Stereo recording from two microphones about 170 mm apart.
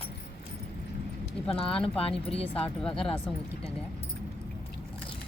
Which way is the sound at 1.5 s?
35° left (ahead or behind).